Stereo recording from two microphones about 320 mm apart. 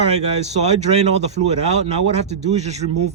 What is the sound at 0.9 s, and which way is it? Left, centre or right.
Speech, centre.